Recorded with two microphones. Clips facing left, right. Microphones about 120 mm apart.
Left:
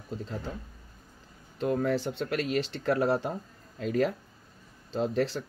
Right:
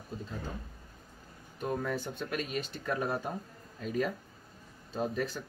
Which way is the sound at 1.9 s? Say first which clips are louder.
Left 6 dB; 90° left.